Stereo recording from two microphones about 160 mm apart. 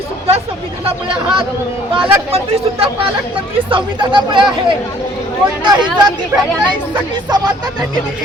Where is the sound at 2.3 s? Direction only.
40° right (ahead or behind).